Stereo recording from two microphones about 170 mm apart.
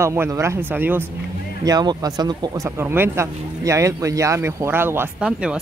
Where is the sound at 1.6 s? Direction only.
20° right (ahead or behind); by 5.5 s 5° right (ahead or behind).